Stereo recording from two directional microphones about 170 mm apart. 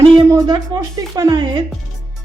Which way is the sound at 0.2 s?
20° right (ahead or behind).